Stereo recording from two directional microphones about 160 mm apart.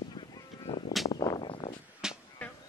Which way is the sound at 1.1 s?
25° left (ahead or behind).